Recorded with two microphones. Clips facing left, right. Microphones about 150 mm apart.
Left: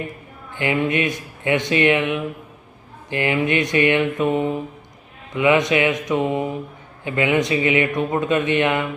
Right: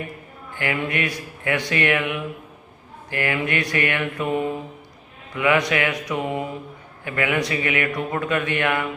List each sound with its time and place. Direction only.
0.5 s speech: 20° left (ahead or behind)